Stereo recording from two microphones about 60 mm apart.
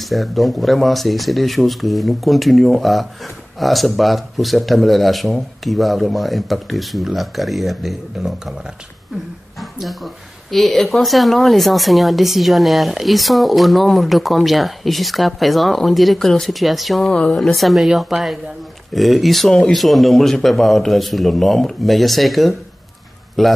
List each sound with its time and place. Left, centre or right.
0.0 s speech: centre
17.1 s speech: centre
17.4 s speech: centre